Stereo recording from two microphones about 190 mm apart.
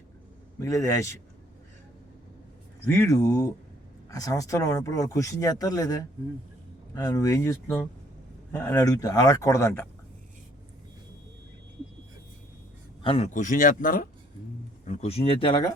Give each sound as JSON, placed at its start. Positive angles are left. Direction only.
{"t": 0.6, "sound": "speech", "side_deg": 15}
{"t": 2.8, "sound": "speech", "side_deg": 15}
{"t": 13.0, "sound": "speech", "side_deg": 30}
{"t": 14.8, "sound": "speech", "side_deg": 35}